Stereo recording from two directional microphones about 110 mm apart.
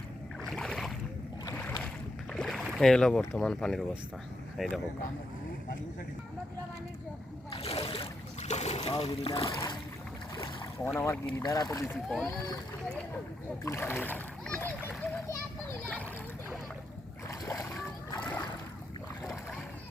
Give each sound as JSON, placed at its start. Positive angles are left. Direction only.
{"t": 0.4, "sound": "boat", "side_deg": 5}
{"t": 2.3, "sound": "speech", "side_deg": 5}
{"t": 7.5, "sound": "a sound", "side_deg": 65}
{"t": 8.9, "sound": "speech", "side_deg": 65}
{"t": 9.4, "sound": "speech", "side_deg": 35}
{"t": 10.8, "sound": "speech", "side_deg": 20}
{"t": 11.3, "sound": "speech", "side_deg": 35}
{"t": 11.9, "sound": "a child's voice", "side_deg": 5}
{"t": 13.7, "sound": "a child's voice", "side_deg": 20}
{"t": 14.8, "sound": "children playing", "side_deg": 15}
{"t": 15.8, "sound": "a child's voice", "side_deg": 10}
{"t": 17.2, "sound": "splash", "side_deg": 30}
{"t": 18.2, "sound": "splash", "side_deg": 15}